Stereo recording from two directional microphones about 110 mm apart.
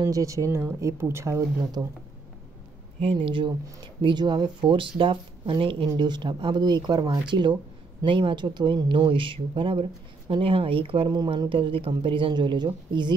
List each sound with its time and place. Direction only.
0.0 s speech: 30° right (ahead or behind)
1.8 s speech: 40° right (ahead or behind)
3.0 s speech: 55° right (ahead or behind)
5.9 s speech: 40° right (ahead or behind)